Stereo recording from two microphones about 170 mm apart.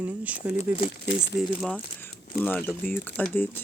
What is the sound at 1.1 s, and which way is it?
Speech, 90° left.